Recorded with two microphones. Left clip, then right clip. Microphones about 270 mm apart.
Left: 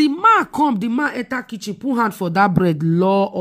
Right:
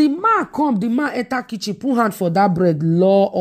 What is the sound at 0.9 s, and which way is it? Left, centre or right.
A woman's voice, centre.